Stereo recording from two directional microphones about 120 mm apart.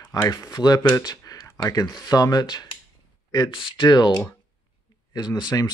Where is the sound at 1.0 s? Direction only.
35° left (ahead or behind).